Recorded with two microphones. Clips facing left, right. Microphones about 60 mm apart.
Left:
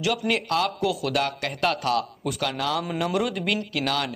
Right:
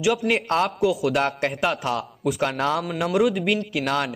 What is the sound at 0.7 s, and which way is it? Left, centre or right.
Speech, centre.